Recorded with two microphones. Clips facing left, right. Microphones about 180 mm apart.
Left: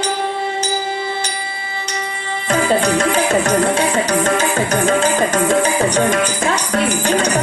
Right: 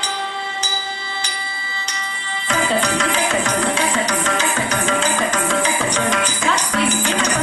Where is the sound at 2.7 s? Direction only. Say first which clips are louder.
Left 5 dB; 50° left (ahead or behind).